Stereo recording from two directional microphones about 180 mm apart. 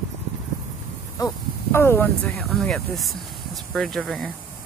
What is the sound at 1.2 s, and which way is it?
Speech, 15° left (ahead or behind).